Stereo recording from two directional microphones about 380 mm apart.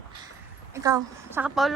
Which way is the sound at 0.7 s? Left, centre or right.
Centre.